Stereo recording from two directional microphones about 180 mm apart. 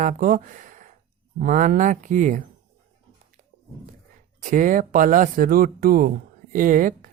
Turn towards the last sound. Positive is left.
turn(degrees=-50)  # may be behind; listen again after turning